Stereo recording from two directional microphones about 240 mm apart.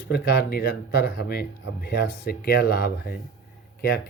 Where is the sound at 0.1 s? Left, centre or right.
Left.